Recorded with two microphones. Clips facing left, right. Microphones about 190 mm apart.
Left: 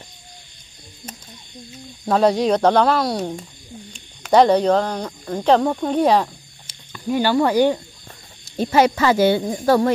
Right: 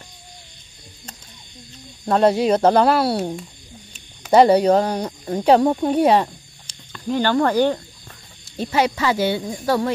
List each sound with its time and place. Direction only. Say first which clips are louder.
2.0 s speech: even; centre (ahead or behind)
6.9 s speech: left 1 dB; 10° left (ahead or behind)
8.5 s speech: left 4 dB; 45° left (ahead or behind)